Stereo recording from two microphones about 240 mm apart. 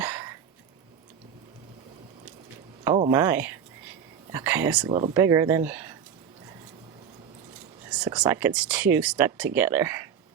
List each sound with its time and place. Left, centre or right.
0.0 s a sound: centre
3.1 s speech: centre
4.9 s speech: right
5.1 s speech: centre
7.9 s speech: centre